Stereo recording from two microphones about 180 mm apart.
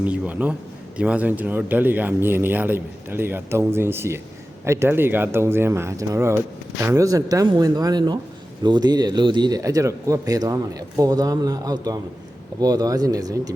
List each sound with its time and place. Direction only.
0.0 s speech: 10° right (ahead or behind)